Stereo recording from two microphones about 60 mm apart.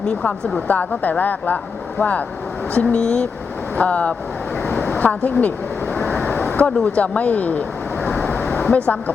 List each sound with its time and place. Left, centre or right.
0.0 s speech: centre
0.7 s speech: left
2.7 s speech: centre
4.6 s vehicle: left
6.8 s speech: left
8.0 s vehicle: left
8.5 s speech: left